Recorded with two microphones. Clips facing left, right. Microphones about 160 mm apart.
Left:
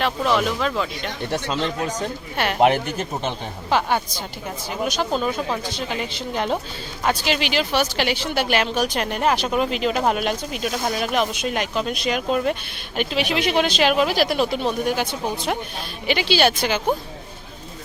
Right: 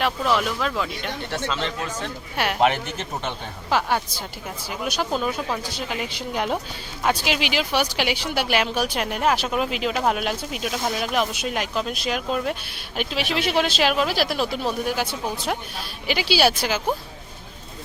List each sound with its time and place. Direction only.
0.0 s speech: 5° right (ahead or behind)
1.3 s speech: 15° left (ahead or behind)
2.3 s a woman's voice: 5° right (ahead or behind)
3.7 s a woman's voice: centre (ahead or behind)